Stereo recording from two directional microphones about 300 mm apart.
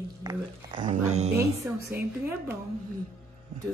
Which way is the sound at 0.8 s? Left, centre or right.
Right.